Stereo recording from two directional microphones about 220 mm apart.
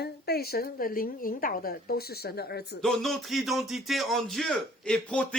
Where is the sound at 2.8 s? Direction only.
Centre (ahead or behind).